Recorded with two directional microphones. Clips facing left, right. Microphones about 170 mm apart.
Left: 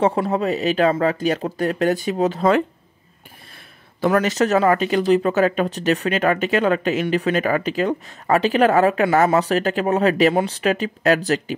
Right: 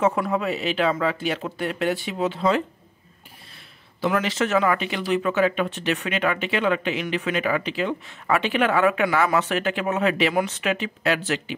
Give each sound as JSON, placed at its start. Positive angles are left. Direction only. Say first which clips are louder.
{"t": 0.0, "sound": "speech", "louder": "left 3 dB", "side_deg": 30}
{"t": 4.0, "sound": "speech", "louder": "left 5 dB", "side_deg": 45}